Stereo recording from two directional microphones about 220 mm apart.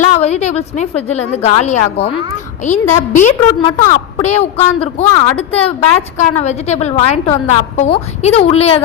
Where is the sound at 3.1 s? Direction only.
35° left (ahead or behind).